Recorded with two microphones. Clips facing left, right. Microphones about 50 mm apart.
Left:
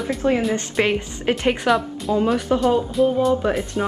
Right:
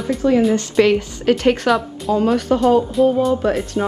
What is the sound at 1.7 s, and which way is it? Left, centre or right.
Speech, centre.